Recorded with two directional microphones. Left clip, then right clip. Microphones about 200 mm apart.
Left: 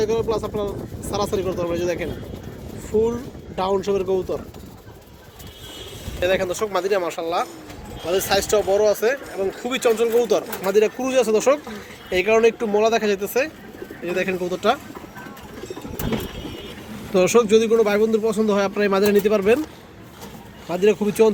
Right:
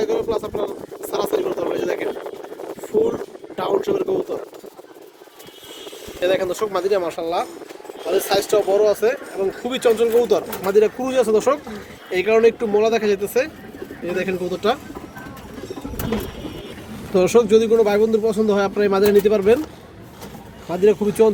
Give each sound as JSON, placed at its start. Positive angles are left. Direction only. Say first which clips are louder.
{"t": 0.0, "sound": "speech", "louder": "even", "side_deg": 25}
{"t": 3.5, "sound": "speech", "louder": "right 1 dB", "side_deg": 25}
{"t": 6.1, "sound": "speech", "louder": "right 1 dB", "side_deg": 0}
{"t": 17.1, "sound": "speech", "louder": "right 1 dB", "side_deg": 0}
{"t": 20.7, "sound": "speech", "louder": "right 2 dB", "side_deg": -5}